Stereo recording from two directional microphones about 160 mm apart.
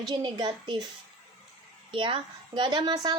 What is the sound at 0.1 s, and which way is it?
Speech, 25° right (ahead or behind).